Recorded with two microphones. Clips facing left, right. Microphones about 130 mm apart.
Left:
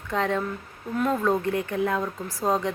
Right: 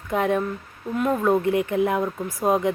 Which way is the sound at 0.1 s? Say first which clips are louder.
Right 3 dB; 15° right (ahead or behind).